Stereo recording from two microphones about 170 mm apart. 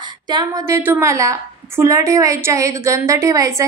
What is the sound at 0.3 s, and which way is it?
A woman's voice, 25° right (ahead or behind).